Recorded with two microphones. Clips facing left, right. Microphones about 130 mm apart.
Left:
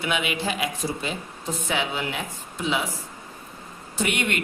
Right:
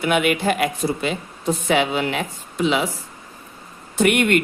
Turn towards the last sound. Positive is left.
turn(degrees=-55)  # may be behind; listen again after turning